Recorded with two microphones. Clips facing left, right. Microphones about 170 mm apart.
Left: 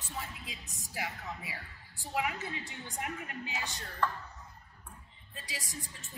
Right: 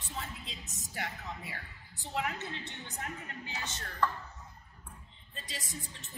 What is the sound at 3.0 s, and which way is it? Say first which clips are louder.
Speech: left 4 dB; 15° left (ahead or behind).